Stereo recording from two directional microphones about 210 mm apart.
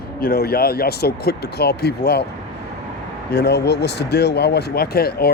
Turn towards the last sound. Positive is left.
turn(degrees=45)  # may be behind; listen again after turning